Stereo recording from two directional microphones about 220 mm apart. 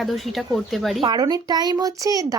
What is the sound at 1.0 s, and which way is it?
Speech, 20° right (ahead or behind).